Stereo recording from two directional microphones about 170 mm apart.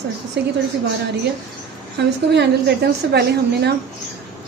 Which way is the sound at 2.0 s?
75° right (ahead or behind).